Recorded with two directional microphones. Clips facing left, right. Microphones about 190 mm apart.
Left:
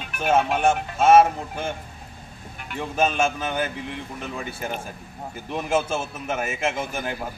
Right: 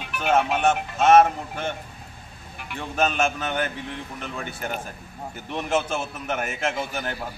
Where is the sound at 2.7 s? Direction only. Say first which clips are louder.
Left 1 dB; 5° left (ahead or behind).